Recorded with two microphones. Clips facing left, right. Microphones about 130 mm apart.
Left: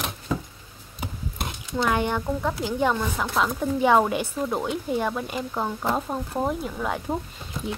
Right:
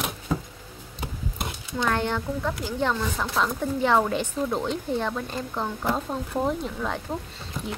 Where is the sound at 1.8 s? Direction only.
15° left (ahead or behind).